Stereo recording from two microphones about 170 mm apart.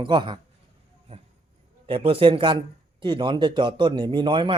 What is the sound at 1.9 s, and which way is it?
A man's voice, 30° right (ahead or behind).